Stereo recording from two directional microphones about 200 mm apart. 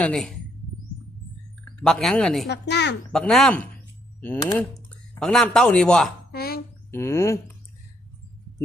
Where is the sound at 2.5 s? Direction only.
60° left (ahead or behind).